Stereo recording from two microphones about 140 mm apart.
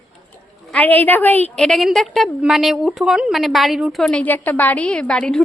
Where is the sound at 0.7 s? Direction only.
10° left (ahead or behind).